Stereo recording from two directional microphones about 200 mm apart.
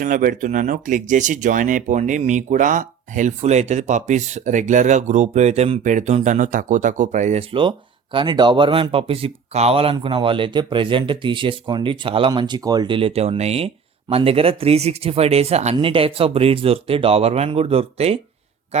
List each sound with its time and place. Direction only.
0.0 s speech: 40° right (ahead or behind)